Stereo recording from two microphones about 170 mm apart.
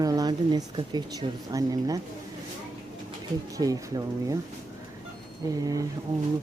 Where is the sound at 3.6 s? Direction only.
20° right (ahead or behind).